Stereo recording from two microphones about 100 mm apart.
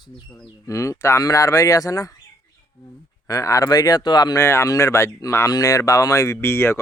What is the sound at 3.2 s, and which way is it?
A man's voice, 35° left (ahead or behind).